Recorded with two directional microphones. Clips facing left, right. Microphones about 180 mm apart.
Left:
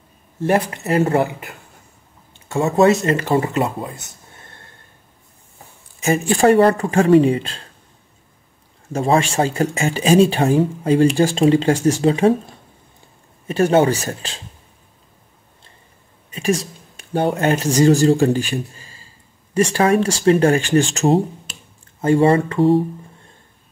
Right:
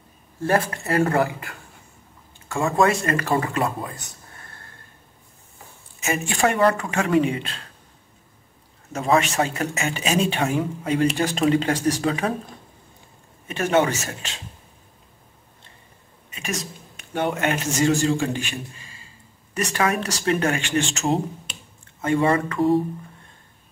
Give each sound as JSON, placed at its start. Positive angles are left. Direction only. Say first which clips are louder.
{"t": 0.4, "sound": "speech", "louder": "left 4 dB", "side_deg": 20}
{"t": 5.9, "sound": "speech", "louder": "left 7 dB", "side_deg": 35}
{"t": 8.9, "sound": "speech", "louder": "left 3 dB", "side_deg": 30}
{"t": 13.5, "sound": "speech", "louder": "left 6 dB", "side_deg": 35}
{"t": 16.3, "sound": "speech", "louder": "left 10 dB", "side_deg": 30}